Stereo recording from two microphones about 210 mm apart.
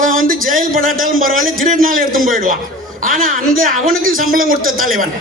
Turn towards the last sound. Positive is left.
turn(degrees=-40)  # may be behind; listen again after turning